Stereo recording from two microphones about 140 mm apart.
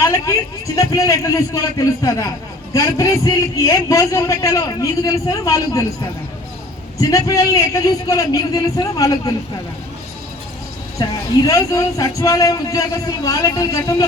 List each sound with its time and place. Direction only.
0.0 s a man's voice: 20° left (ahead or behind)
7.0 s a man's voice: 25° left (ahead or behind)
11.0 s a man's voice: 30° left (ahead or behind)